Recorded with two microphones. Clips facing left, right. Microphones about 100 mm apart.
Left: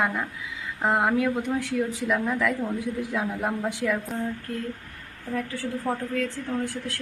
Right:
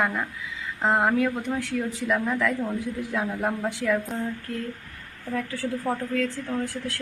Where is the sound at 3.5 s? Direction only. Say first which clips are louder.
Right 3 dB; 15° left (ahead or behind).